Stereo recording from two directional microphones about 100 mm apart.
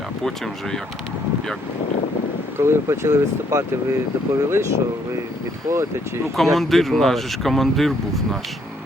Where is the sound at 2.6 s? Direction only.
25° right (ahead or behind).